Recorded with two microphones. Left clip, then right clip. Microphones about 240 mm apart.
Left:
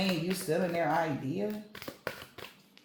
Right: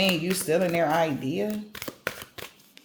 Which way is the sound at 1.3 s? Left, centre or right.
Right.